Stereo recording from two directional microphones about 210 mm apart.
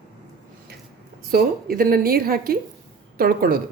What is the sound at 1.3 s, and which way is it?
Speech, 45° right (ahead or behind).